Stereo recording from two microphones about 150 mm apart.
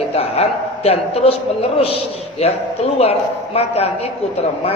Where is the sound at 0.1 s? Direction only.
40° left (ahead or behind).